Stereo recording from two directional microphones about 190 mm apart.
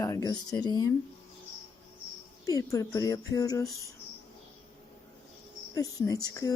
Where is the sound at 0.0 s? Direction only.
20° left (ahead or behind).